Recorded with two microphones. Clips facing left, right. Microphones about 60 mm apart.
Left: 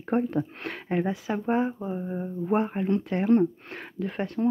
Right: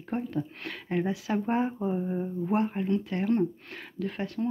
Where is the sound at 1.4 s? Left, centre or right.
Centre.